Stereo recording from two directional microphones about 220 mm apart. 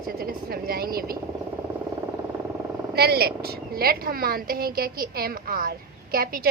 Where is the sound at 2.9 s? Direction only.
45° right (ahead or behind).